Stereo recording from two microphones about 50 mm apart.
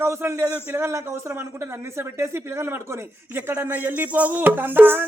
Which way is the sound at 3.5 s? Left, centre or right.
Right.